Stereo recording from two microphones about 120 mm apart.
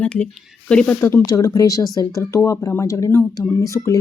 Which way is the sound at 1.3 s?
30° left (ahead or behind).